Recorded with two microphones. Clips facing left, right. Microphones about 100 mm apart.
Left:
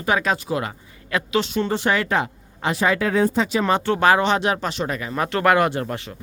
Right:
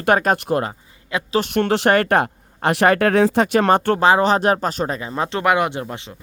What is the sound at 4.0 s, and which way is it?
Speech, 30° right (ahead or behind).